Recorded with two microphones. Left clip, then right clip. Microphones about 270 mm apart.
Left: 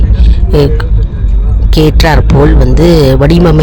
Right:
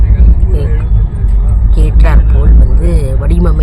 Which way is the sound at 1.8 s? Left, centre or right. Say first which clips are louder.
Left 12 dB; left.